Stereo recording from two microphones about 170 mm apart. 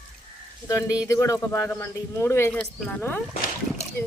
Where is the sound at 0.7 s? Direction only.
20° left (ahead or behind).